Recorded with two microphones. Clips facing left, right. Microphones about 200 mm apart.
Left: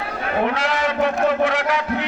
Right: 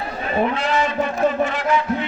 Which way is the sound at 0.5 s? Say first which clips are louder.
Right 1 dB; 90° left.